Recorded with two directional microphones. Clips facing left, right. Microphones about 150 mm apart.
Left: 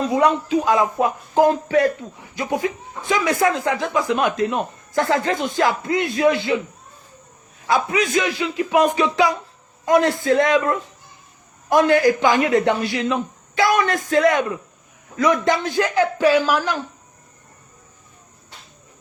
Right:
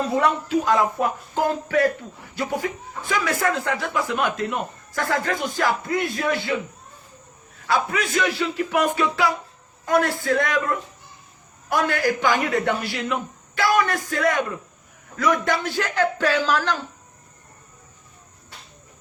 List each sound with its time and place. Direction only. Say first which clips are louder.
0.1 s speech: left 5 dB; 15° left (ahead or behind)
7.7 s speech: left 4 dB; 15° left (ahead or behind)
11.7 s speech: left 7 dB; 20° left (ahead or behind)
15.4 s speech: left 5 dB; 15° left (ahead or behind)